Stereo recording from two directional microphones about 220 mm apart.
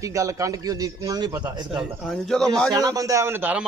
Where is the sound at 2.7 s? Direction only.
15° right (ahead or behind).